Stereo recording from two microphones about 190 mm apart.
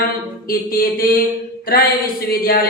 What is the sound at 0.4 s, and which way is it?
Speech, 50° left (ahead or behind).